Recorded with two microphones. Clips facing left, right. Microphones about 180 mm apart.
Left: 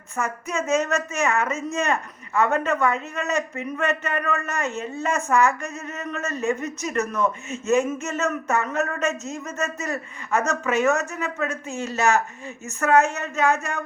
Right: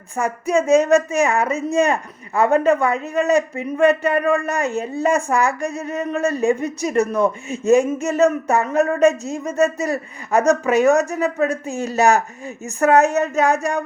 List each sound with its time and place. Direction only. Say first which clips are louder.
0.2 s speech: right 8 dB; 35° right (ahead or behind)